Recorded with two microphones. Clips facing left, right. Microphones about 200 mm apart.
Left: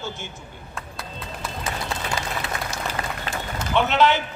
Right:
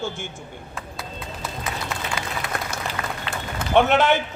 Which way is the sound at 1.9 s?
30° left (ahead or behind).